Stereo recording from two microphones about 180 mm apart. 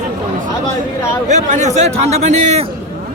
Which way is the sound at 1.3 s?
40° right (ahead or behind).